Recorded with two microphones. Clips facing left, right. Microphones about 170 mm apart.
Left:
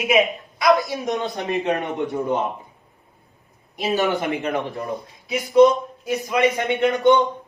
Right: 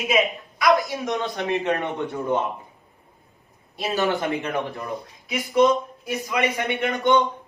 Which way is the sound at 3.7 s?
20° left (ahead or behind).